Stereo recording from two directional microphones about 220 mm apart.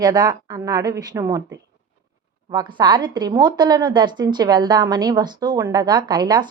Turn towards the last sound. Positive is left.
turn(degrees=-20)  # may be behind; listen again after turning